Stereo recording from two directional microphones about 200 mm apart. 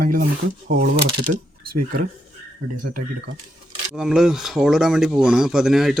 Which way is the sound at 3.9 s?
5° right (ahead or behind).